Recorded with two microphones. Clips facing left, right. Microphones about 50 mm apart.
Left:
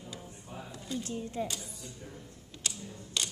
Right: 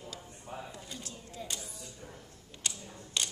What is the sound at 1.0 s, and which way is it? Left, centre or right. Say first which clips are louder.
Speech: left 9 dB; left.